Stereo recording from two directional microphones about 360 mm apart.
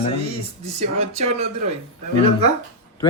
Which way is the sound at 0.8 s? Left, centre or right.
Centre.